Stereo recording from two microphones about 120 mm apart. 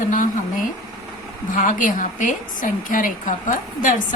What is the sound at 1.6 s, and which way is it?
A woman's voice, 90° left.